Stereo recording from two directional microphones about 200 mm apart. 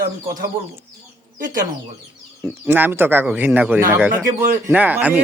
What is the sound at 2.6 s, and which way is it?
Speech, 10° right (ahead or behind).